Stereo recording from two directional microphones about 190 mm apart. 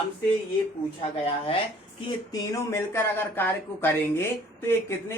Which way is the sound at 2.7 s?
10° left (ahead or behind).